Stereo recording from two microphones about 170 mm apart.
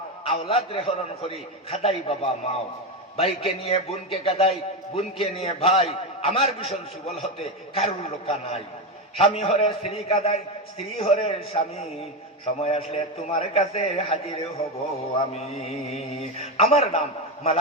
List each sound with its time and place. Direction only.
0.3 s a man's voice: 35° left (ahead or behind)